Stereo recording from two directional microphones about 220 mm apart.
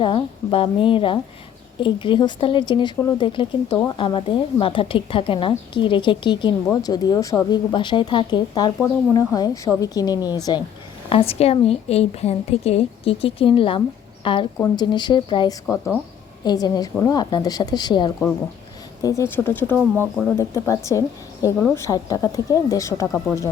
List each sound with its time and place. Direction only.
0.0 s a woman's voice: 25° left (ahead or behind)
15.6 s speech: 5° left (ahead or behind)
16.4 s speech: 20° left (ahead or behind)